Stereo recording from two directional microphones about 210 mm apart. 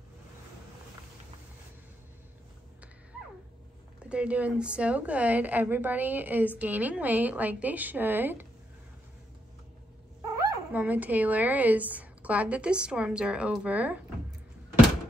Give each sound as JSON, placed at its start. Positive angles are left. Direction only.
{"t": 4.0, "sound": "a woman's voice", "side_deg": -5}
{"t": 10.4, "sound": "bow-wow", "side_deg": -15}
{"t": 10.8, "sound": "a woman's voice", "side_deg": -10}